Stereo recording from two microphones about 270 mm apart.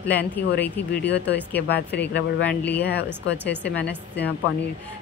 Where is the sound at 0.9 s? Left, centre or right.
Left.